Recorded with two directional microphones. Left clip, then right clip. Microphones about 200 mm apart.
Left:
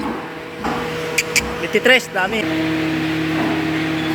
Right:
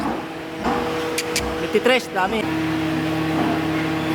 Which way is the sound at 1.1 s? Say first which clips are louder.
Left 4 dB; centre (ahead or behind).